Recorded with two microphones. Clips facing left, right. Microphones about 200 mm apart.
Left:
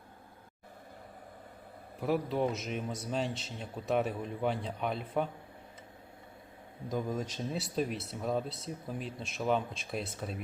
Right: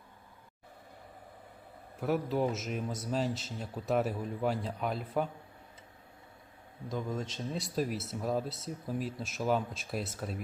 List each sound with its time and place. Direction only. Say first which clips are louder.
2.0 s speech: even; centre (ahead or behind)
6.9 s speech: left 2 dB; 10° left (ahead or behind)